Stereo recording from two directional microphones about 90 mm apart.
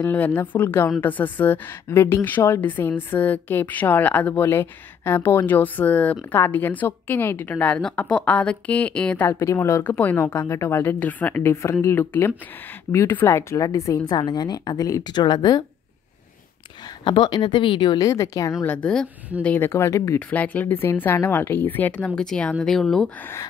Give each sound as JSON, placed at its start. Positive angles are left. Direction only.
{"t": 0.0, "sound": "a woman's voice", "side_deg": 20}
{"t": 9.3, "sound": "a woman's voice", "side_deg": 35}
{"t": 14.1, "sound": "speech", "side_deg": 50}
{"t": 15.2, "sound": "speech", "side_deg": 55}
{"t": 17.0, "sound": "speech", "side_deg": 65}
{"t": 17.9, "sound": "a woman's voice", "side_deg": 40}
{"t": 18.6, "sound": "a woman's voice", "side_deg": 15}
{"t": 19.7, "sound": "a woman's voice", "side_deg": 30}
{"t": 20.2, "sound": "a woman's voice", "side_deg": 15}